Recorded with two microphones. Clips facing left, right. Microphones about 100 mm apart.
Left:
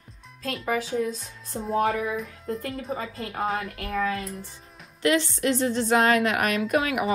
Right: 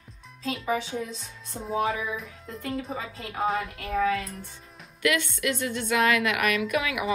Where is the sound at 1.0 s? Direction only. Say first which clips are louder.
Left 7 dB; 45° left (ahead or behind).